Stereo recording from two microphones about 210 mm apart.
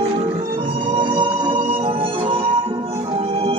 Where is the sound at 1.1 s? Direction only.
25° right (ahead or behind).